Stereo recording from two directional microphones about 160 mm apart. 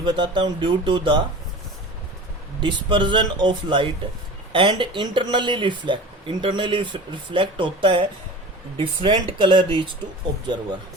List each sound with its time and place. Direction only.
0.0 s speech: 30° right (ahead or behind)
2.6 s speech: 30° right (ahead or behind)